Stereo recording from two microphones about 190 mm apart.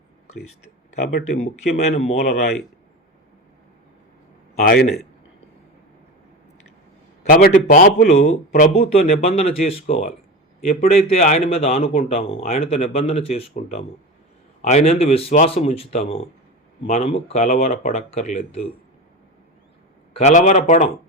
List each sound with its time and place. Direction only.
1.4 s a man's voice: 35° left (ahead or behind)
4.5 s a man's voice: 50° left (ahead or behind)
7.3 s a man's voice: 45° left (ahead or behind)
20.1 s a man's voice: 35° left (ahead or behind)